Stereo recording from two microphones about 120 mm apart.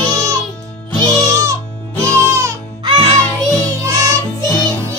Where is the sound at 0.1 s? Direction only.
25° right (ahead or behind).